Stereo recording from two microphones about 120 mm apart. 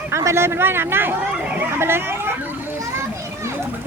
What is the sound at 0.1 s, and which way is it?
Speech, 25° right (ahead or behind).